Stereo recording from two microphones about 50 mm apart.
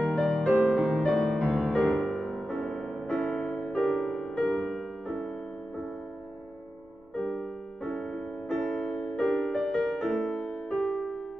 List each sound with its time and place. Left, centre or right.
0.0 s music: centre
0.6 s music: centre
1.4 s music: centre
1.7 s music: centre
3.7 s music: centre
7.2 s music: centre